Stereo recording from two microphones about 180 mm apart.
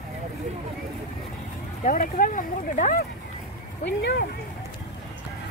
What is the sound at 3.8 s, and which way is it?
Speech, 70° left (ahead or behind).